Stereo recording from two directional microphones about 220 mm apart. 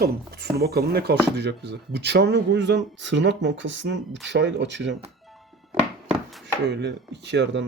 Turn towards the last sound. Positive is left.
turn(degrees=-55)  # may be behind; listen again after turning